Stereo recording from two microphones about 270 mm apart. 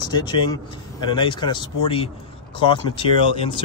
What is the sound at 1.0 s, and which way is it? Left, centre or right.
Speech, centre.